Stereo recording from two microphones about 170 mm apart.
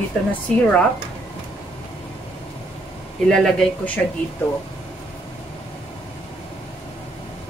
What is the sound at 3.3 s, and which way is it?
Speech, centre (ahead or behind).